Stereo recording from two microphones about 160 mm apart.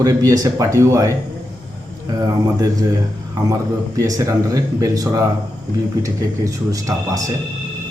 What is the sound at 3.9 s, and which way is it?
A man's voice, 20° right (ahead or behind).